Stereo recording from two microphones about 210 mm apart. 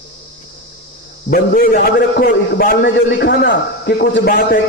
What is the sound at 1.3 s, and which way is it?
A man's voice, 45° left (ahead or behind).